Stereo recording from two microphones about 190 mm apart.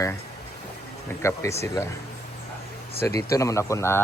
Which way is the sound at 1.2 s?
15° left (ahead or behind).